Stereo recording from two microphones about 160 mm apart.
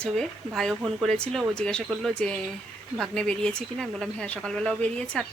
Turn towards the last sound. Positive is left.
turn(degrees=5)  # may be behind; listen again after turning